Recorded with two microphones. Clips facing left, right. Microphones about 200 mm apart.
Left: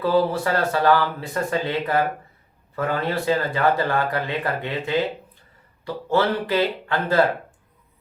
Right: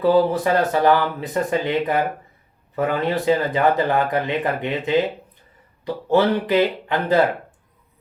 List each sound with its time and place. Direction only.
0.0 s speech: 20° right (ahead or behind)